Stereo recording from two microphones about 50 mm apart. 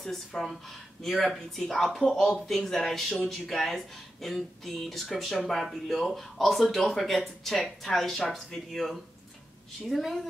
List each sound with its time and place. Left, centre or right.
0.0 s speech: centre